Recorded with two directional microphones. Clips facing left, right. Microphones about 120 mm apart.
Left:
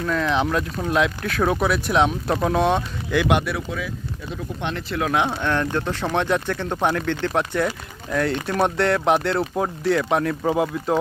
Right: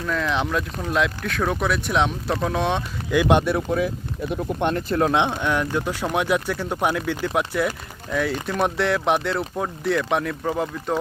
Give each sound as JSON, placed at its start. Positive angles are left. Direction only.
{"t": 0.0, "sound": "speech", "side_deg": 0}
{"t": 3.2, "sound": "speech", "side_deg": -35}
{"t": 5.1, "sound": "speech", "side_deg": -15}